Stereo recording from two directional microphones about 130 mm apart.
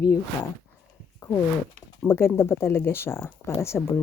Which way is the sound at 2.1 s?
20° left (ahead or behind).